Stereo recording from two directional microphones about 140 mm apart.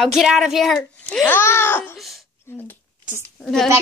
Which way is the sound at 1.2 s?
15° left (ahead or behind).